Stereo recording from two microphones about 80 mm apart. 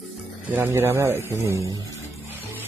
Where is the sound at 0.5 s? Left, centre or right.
Right.